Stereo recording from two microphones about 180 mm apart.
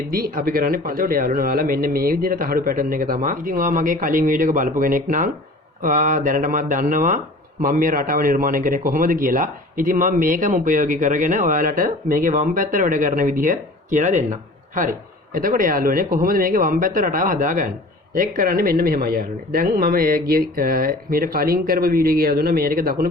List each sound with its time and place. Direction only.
0.1 s a man's voice: 55° right (ahead or behind)